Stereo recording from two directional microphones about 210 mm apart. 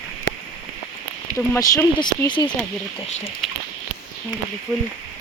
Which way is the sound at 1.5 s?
15° left (ahead or behind).